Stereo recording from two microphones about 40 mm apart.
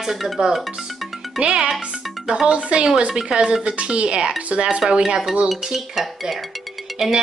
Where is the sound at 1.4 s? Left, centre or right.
Right.